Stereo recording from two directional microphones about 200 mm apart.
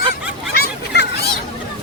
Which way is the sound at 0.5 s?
55° left (ahead or behind).